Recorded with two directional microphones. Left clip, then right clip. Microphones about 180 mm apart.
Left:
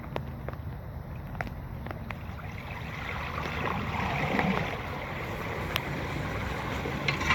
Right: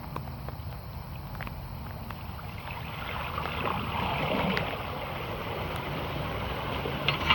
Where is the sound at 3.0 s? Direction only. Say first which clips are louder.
Right 1 dB; 10° left (ahead or behind).